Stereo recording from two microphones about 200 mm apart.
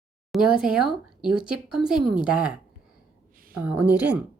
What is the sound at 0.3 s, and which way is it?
Speech, centre (ahead or behind).